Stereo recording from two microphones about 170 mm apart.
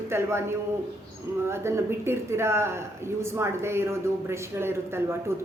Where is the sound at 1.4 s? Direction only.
15° right (ahead or behind).